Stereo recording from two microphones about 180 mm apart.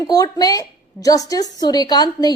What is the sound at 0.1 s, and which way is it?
A woman's voice, 20° left (ahead or behind).